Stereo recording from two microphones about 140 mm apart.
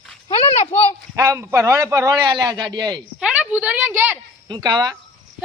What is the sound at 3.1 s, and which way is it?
A woman's voice, 5° right (ahead or behind).